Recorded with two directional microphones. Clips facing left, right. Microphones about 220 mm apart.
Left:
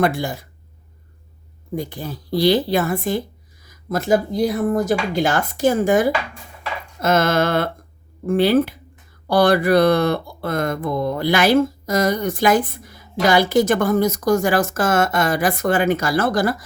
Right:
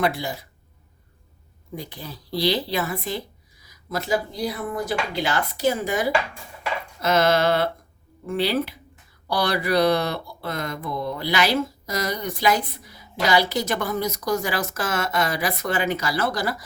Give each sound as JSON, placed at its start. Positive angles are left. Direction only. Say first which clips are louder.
{"t": 0.0, "sound": "speech", "louder": "left 5 dB", "side_deg": 50}
{"t": 1.7, "sound": "speech", "louder": "left 8 dB", "side_deg": 50}